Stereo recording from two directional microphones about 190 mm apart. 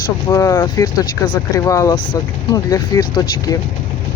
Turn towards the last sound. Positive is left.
turn(degrees=20)  # may be behind; listen again after turning